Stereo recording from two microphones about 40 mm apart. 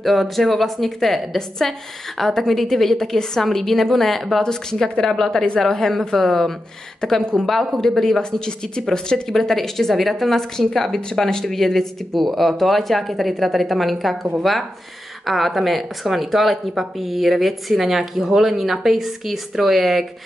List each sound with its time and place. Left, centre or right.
0.0 s a woman's voice: centre
4.4 s a woman's voice: centre
9.3 s a woman's voice: centre